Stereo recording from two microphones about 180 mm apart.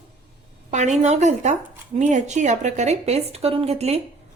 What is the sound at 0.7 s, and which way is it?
A woman's voice, 40° right (ahead or behind).